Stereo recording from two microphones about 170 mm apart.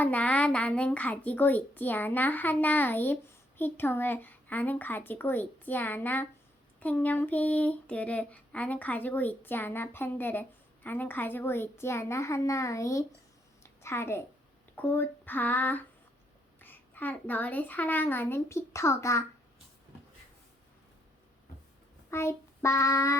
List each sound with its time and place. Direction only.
0.0 s speech: 10° left (ahead or behind)
13.6 s a sound: 15° left (ahead or behind)
14.8 s speech: 10° left (ahead or behind)
22.1 s child singing: 15° left (ahead or behind)